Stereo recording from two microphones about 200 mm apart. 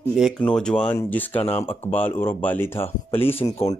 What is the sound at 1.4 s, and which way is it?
Speech, 30° left (ahead or behind).